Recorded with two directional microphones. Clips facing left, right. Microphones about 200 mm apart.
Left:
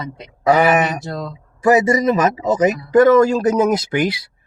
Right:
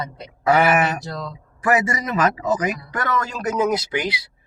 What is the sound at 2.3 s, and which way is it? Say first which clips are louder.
A man's voice: left 6 dB; 25° left (ahead or behind).